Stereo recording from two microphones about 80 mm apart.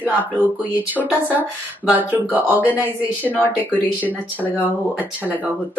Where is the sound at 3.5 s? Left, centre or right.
Right.